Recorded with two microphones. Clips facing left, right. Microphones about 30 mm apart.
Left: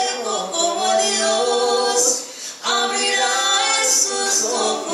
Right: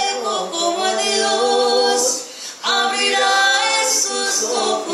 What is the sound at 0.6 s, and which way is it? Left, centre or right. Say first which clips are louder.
A capella: left 2 dB; right.